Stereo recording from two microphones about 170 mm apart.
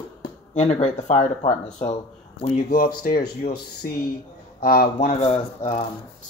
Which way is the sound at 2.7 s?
60° left (ahead or behind).